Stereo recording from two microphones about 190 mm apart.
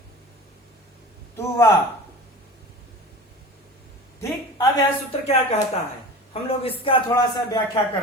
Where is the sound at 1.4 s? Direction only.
15° left (ahead or behind).